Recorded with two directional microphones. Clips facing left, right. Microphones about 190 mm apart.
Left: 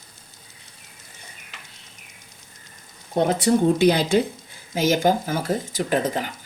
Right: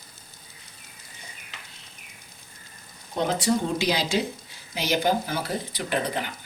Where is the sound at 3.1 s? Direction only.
55° left (ahead or behind); by 6.3 s 40° left (ahead or behind).